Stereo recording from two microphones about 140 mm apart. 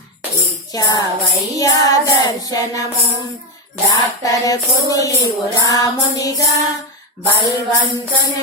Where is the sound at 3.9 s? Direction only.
25° left (ahead or behind).